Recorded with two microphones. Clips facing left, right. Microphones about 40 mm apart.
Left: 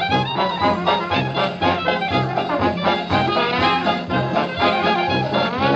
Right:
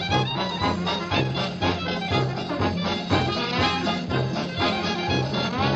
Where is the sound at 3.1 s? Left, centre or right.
Left.